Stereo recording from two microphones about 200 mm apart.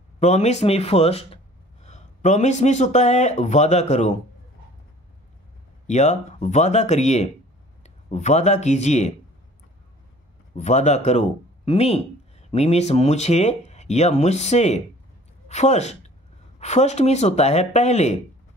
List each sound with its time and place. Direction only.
0.2 s speech: 35° left (ahead or behind)
5.9 s speech: 35° left (ahead or behind)
10.5 s a woman's voice: 35° left (ahead or behind)